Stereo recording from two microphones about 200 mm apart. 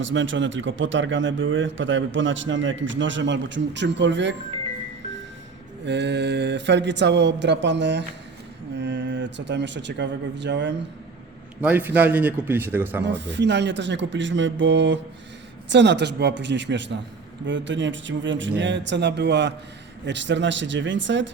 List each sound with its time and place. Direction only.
0.0 s a man's voice: 70° right (ahead or behind)
5.8 s a man's voice: 60° right (ahead or behind)
11.6 s speech: 10° right (ahead or behind)
13.1 s speech: 60° right (ahead or behind)